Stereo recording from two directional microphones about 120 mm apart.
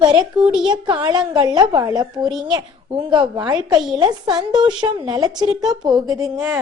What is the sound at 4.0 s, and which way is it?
A woman's voice, 40° right (ahead or behind).